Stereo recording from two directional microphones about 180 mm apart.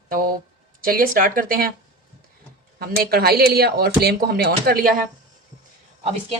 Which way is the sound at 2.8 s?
60° right (ahead or behind).